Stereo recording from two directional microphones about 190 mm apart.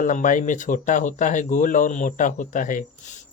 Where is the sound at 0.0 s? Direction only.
45° left (ahead or behind).